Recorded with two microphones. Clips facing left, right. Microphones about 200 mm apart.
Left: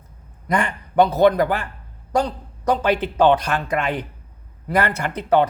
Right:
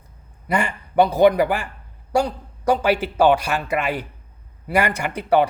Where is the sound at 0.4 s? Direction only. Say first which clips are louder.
Left 1 dB; 10° right (ahead or behind).